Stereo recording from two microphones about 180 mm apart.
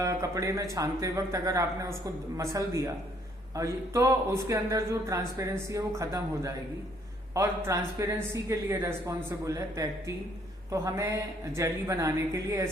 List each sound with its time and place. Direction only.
0.0 s speech: 15° right (ahead or behind)